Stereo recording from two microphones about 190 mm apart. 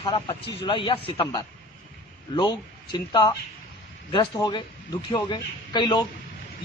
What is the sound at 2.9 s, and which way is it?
Speech, 25° left (ahead or behind).